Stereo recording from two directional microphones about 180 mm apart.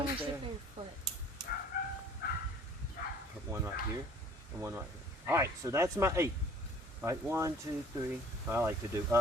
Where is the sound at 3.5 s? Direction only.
15° right (ahead or behind).